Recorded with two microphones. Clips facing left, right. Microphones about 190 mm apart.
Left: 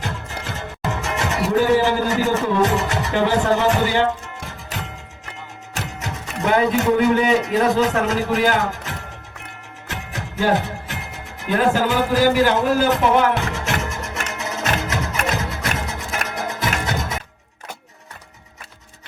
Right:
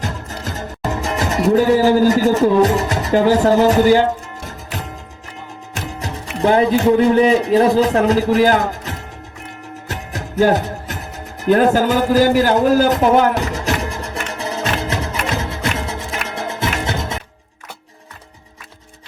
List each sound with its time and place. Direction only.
0.0 s music: 40° right (ahead or behind)
1.5 s a man's voice: 35° right (ahead or behind)
6.4 s a man's voice: 30° right (ahead or behind)
9.9 s music: 40° right (ahead or behind)
11.4 s a man's voice: 40° right (ahead or behind)
14.3 s music: 30° right (ahead or behind)